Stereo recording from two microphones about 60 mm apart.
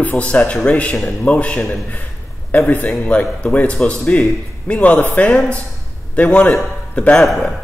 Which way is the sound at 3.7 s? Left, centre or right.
Centre.